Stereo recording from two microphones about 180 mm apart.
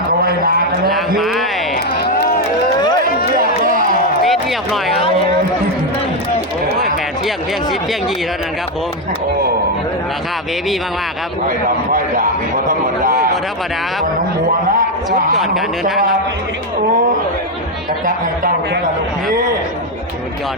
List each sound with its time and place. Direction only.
0.2 s a sound: 55° right (ahead or behind)
1.2 s speech: centre (ahead or behind)
1.7 s music: 55° left (ahead or behind)
4.3 s a sound: centre (ahead or behind)
11.4 s a man's voice: 50° right (ahead or behind)
18.0 s a man's voice: 50° right (ahead or behind)